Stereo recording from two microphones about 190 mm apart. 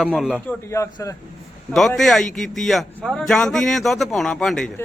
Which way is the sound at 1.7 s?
Centre (ahead or behind).